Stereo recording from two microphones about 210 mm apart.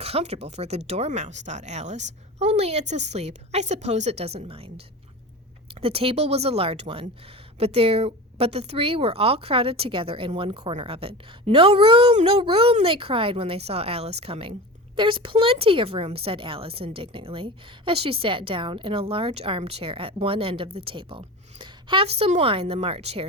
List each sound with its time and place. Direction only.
0.0 s a woman's voice: 30° right (ahead or behind)